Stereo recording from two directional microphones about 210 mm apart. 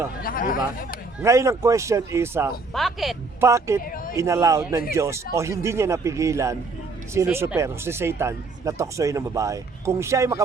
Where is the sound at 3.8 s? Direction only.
40° left (ahead or behind).